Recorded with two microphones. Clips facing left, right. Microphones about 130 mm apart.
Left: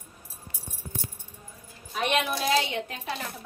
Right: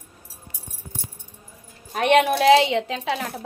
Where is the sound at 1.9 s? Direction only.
60° right (ahead or behind); by 3.4 s 85° right.